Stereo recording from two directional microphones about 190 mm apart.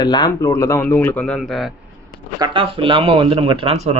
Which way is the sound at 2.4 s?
25° right (ahead or behind).